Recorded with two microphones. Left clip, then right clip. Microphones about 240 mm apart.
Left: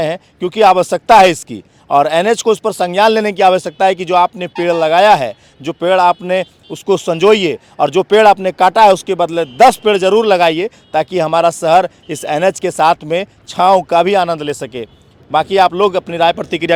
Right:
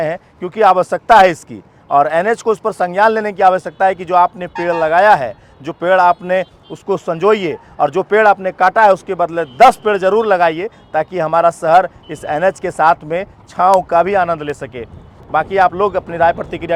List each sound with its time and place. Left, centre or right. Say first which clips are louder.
0.0 s speech: left 2 dB; left